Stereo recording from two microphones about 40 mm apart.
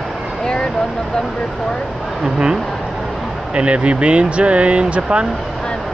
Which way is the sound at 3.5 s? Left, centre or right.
Right.